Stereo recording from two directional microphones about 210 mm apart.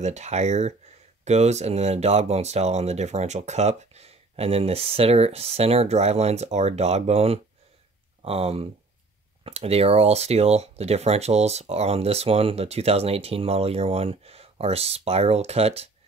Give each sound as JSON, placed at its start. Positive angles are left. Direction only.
{"t": 0.0, "sound": "speech", "side_deg": -35}